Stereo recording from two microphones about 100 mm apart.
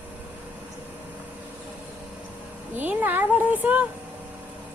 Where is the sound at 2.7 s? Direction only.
15° right (ahead or behind).